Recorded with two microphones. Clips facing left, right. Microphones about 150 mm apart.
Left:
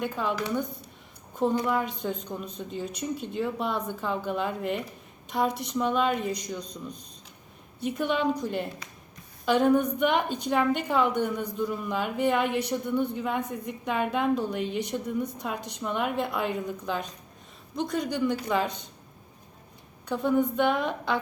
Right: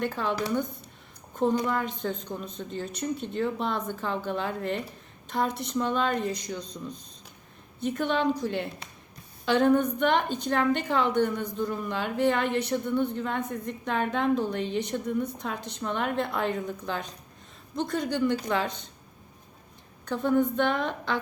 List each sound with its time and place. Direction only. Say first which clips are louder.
0.0 s a woman's voice: even; 10° left (ahead or behind)
1.6 s a woman's voice: left 1 dB; 10° left (ahead or behind)
7.8 s a woman's voice: even; 10° left (ahead or behind)
20.1 s a woman's voice: even; 10° left (ahead or behind)